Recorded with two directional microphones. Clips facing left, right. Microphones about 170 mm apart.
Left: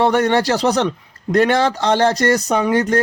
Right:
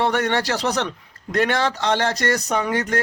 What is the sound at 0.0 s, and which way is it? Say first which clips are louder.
A man's voice: left 6 dB; 35° left (ahead or behind).